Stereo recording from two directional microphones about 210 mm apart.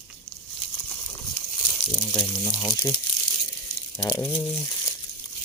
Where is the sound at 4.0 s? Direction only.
10° left (ahead or behind).